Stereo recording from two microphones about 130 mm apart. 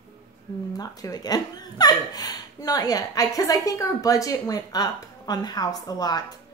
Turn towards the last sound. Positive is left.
turn(degrees=30)  # may be behind; listen again after turning